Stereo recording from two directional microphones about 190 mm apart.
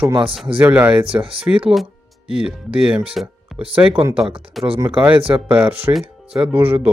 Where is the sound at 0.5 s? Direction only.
10° right (ahead or behind).